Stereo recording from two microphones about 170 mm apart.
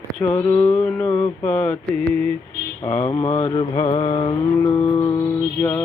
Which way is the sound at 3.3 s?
40° left (ahead or behind).